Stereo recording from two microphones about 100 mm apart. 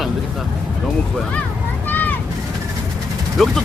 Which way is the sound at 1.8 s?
20° left (ahead or behind).